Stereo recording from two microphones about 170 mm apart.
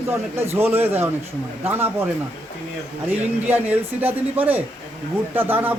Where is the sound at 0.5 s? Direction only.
15° right (ahead or behind).